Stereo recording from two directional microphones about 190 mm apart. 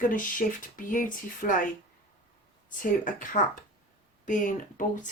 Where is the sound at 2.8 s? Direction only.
45° left (ahead or behind).